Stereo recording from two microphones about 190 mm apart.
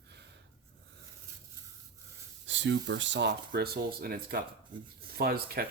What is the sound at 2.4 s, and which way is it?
Speech, 75° right (ahead or behind).